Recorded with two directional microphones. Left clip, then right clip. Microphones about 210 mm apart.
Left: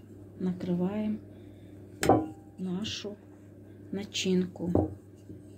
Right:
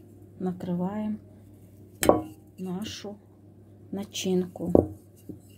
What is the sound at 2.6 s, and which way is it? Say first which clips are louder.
A woman's voice: even; 45° right (ahead or behind).